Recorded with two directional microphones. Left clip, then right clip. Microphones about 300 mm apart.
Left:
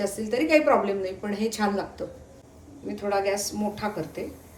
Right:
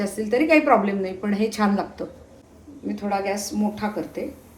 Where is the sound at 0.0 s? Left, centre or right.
Right.